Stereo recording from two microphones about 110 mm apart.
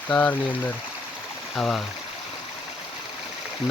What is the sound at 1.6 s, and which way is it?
Speech, 5° left (ahead or behind).